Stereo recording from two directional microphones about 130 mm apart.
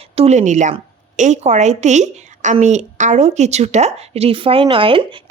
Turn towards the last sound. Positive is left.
turn(degrees=-40)  # may be behind; listen again after turning